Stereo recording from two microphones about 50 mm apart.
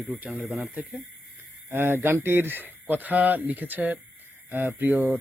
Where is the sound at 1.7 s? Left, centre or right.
Right.